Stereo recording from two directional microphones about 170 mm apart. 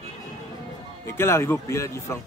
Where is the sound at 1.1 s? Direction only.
15° left (ahead or behind).